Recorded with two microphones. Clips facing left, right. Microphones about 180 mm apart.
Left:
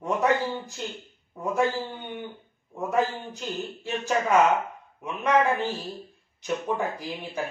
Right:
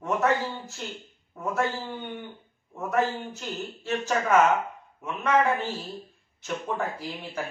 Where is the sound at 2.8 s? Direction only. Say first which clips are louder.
Even; 15° left (ahead or behind).